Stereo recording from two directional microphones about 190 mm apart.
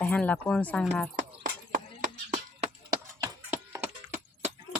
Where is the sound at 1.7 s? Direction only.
45° right (ahead or behind).